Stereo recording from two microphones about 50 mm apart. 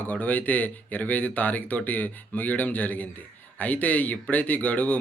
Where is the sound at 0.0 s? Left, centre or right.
Left.